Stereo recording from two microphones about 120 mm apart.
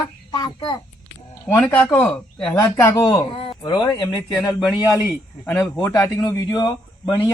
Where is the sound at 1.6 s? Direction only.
15° left (ahead or behind); by 4.0 s 35° left (ahead or behind).